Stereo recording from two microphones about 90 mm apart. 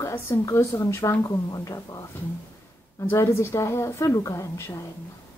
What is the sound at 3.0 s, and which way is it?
A woman's voice, 30° left (ahead or behind).